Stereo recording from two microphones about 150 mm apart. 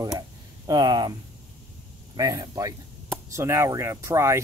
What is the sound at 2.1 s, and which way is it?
Speech, 25° right (ahead or behind).